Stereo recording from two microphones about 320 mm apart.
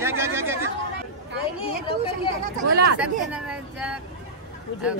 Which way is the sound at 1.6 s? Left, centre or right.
Centre.